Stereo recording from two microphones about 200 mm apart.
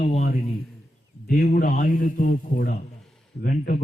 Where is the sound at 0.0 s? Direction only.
40° left (ahead or behind).